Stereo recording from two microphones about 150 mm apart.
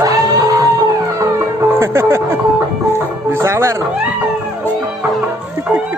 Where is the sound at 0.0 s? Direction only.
25° right (ahead or behind).